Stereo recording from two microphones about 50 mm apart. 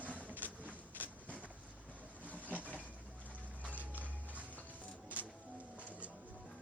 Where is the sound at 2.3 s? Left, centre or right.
Left.